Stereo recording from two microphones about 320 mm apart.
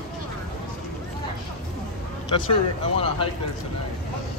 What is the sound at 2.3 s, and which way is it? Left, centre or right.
Speech, centre.